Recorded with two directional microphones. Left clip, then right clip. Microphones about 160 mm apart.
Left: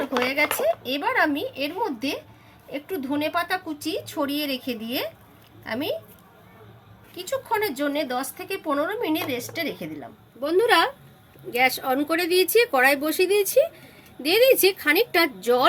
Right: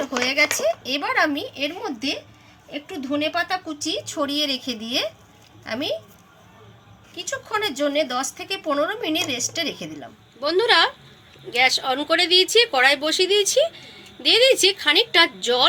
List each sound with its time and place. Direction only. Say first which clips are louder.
0.0 s a woman's voice: right 2 dB; 5° left (ahead or behind)
7.5 s a woman's voice: right 3 dB; 10° left (ahead or behind)
10.4 s speech: right 2 dB; 75° left (ahead or behind)
11.5 s speech: right 2 dB; 90° left